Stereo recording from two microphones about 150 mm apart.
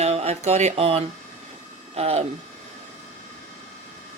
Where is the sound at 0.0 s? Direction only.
45° right (ahead or behind).